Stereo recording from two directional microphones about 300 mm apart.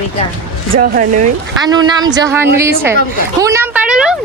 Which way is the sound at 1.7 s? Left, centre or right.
Centre.